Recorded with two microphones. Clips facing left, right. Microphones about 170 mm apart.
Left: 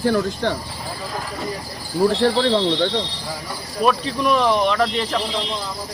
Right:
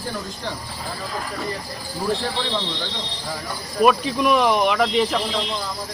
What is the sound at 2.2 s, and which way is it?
Speech, 70° left (ahead or behind).